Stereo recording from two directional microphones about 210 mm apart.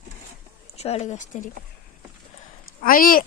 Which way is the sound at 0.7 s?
30° left (ahead or behind).